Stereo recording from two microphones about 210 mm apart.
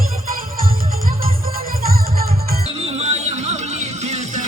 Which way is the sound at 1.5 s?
45° right (ahead or behind).